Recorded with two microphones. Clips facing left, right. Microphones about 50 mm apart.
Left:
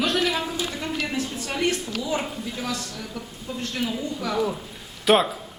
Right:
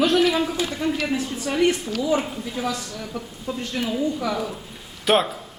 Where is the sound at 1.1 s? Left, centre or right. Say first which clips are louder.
Right 4 dB; centre.